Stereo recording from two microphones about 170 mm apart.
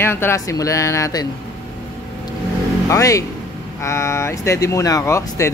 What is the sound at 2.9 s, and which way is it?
Speech, 20° left (ahead or behind).